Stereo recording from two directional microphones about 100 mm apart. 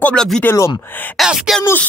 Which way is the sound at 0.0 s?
10° left (ahead or behind).